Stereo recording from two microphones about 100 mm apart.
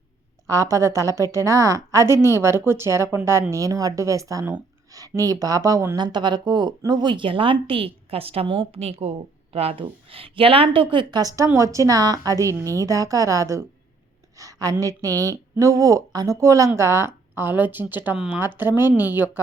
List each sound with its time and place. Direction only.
0.4 s a woman's voice: 35° right (ahead or behind)
6.0 s speech: 50° right (ahead or behind)
11.2 s a woman's voice: 35° right (ahead or behind); by 19.3 s 20° right (ahead or behind)